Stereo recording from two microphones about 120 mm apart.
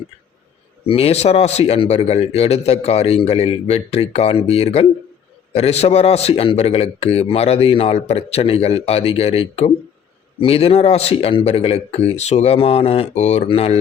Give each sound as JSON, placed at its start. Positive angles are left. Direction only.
{"t": 0.9, "sound": "a man's voice", "side_deg": 55}
{"t": 13.5, "sound": "a man's voice", "side_deg": 55}